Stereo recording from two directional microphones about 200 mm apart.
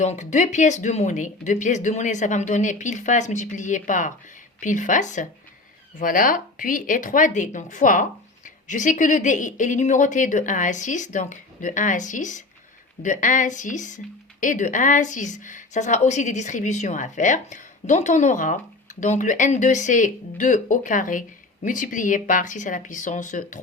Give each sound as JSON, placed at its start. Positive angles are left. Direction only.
{"t": 0.0, "sound": "a woman's voice", "side_deg": 35}